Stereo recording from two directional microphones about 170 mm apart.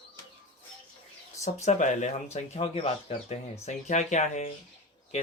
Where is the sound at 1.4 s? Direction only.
45° left (ahead or behind).